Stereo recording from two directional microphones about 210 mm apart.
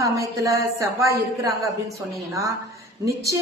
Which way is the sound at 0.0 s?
15° right (ahead or behind).